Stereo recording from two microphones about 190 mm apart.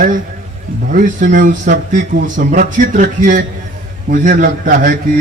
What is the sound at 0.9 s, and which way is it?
Speech, 45° right (ahead or behind).